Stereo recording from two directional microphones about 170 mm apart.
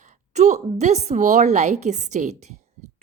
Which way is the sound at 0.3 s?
45° right (ahead or behind).